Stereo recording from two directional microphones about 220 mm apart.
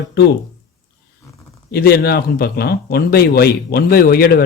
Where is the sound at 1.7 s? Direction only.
45° left (ahead or behind).